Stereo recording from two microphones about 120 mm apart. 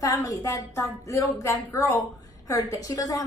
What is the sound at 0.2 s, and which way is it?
A woman's voice, 30° left (ahead or behind).